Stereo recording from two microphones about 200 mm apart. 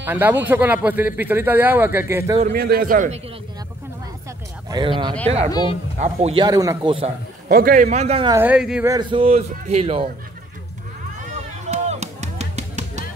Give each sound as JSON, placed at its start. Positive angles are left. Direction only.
{"t": 0.0, "sound": "speech", "side_deg": -10}
{"t": 2.5, "sound": "a man's voice", "side_deg": -50}
{"t": 4.6, "sound": "speech", "side_deg": -25}
{"t": 5.5, "sound": "a woman's voice", "side_deg": 20}
{"t": 5.9, "sound": "speech", "side_deg": -30}
{"t": 7.4, "sound": "a man's voice", "side_deg": -45}
{"t": 8.3, "sound": "speech", "side_deg": -10}
{"t": 8.8, "sound": "speech", "side_deg": -20}
{"t": 11.1, "sound": "music", "side_deg": -35}